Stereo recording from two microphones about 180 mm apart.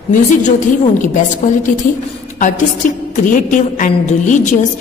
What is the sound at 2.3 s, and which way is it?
A woman's voice, 45° left (ahead or behind).